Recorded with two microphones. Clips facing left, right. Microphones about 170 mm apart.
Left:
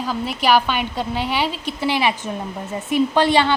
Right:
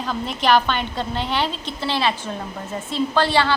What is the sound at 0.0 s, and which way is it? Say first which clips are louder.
A woman's voice: left 1 dB; 5° left (ahead or behind).